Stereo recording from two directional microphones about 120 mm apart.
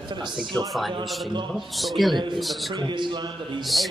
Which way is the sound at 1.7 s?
Centre (ahead or behind).